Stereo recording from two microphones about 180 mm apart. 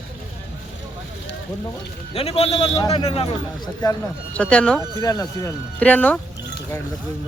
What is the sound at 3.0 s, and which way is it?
Speech, 30° left (ahead or behind).